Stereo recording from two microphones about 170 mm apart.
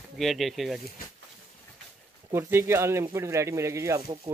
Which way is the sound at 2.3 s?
15° right (ahead or behind).